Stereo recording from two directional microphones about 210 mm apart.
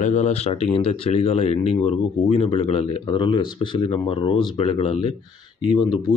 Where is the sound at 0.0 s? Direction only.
35° left (ahead or behind).